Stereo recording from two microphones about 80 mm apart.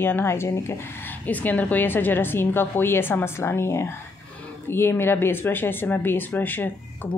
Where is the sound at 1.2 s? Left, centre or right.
Left.